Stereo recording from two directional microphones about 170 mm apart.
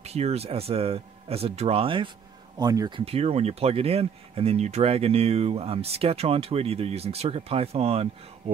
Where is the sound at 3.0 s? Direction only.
35° right (ahead or behind).